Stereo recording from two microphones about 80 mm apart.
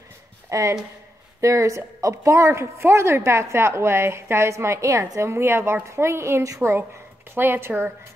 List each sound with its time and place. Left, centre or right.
0.5 s a woman's voice: right